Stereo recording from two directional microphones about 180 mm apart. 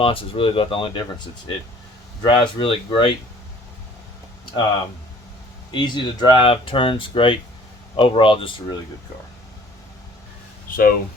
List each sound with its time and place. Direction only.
0.0 s speech: 30° left (ahead or behind)
5.7 s speech: 25° left (ahead or behind)
10.7 s speech: 55° left (ahead or behind)